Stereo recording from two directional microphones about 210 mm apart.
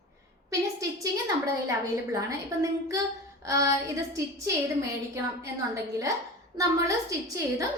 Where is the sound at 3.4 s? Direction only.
15° right (ahead or behind).